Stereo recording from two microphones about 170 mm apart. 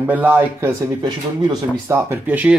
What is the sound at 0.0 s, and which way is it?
Speech, 10° right (ahead or behind).